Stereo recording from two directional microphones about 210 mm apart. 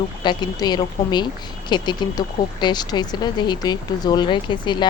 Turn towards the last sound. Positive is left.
turn(degrees=20)  # may be behind; listen again after turning